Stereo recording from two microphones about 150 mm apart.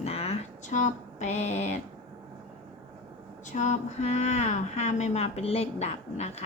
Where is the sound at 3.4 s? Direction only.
55° left (ahead or behind).